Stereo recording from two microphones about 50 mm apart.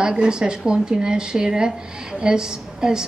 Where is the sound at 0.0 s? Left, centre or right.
Centre.